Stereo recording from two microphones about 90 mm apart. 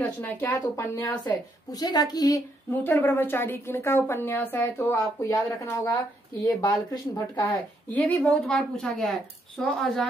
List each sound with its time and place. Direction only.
0.0 s a woman's voice: 20° left (ahead or behind)
1.7 s a woman's voice: 45° left (ahead or behind)
2.7 s a woman's voice: 20° left (ahead or behind)
4.9 s speech: 35° left (ahead or behind)
6.6 s a woman's voice: 50° left (ahead or behind)
7.4 s a woman's voice: 15° left (ahead or behind)